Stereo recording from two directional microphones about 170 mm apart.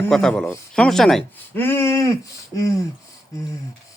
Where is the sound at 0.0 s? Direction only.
5° left (ahead or behind).